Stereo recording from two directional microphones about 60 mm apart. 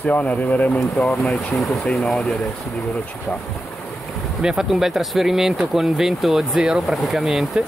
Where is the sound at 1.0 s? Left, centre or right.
Centre.